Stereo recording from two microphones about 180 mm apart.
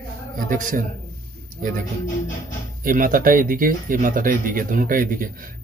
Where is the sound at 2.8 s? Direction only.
50° right (ahead or behind).